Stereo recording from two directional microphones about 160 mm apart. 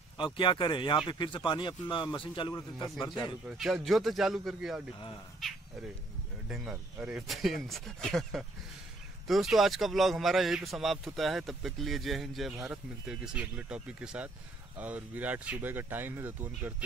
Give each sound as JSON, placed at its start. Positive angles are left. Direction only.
{"t": 0.2, "sound": "speech", "side_deg": 30}
{"t": 3.4, "sound": "a man's voice", "side_deg": 0}